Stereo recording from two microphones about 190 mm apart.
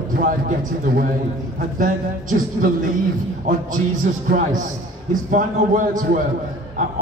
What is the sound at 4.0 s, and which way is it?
A man's voice, 45° right (ahead or behind).